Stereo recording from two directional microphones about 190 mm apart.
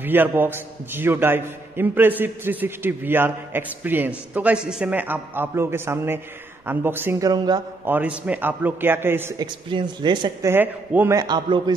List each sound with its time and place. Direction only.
0.0 s a man's voice: 10° right (ahead or behind)
7.8 s a man's voice: 10° right (ahead or behind)
9.7 s speech: 25° right (ahead or behind)
10.5 s a man's voice: 10° right (ahead or behind)